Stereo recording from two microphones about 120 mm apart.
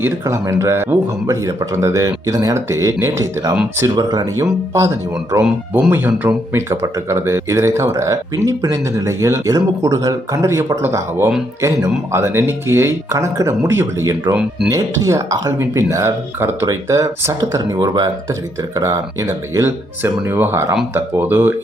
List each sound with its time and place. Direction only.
0.4 s speech: 25° right (ahead or behind)